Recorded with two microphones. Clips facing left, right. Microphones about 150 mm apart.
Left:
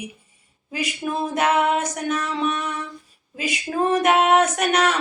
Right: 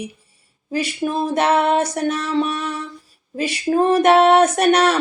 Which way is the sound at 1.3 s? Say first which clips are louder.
Right 3 dB; 35° right (ahead or behind).